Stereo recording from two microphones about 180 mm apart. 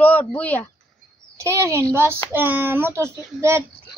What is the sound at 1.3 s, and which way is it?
A child's voice, 15° right (ahead or behind).